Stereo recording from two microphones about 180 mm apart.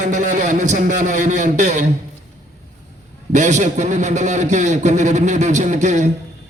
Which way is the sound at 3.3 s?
40° right (ahead or behind).